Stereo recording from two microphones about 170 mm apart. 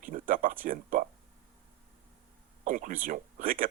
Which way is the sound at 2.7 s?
50° right (ahead or behind).